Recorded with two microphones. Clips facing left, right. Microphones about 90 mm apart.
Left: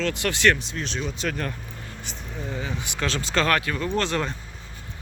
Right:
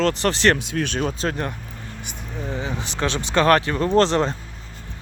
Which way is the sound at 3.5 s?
30° right (ahead or behind).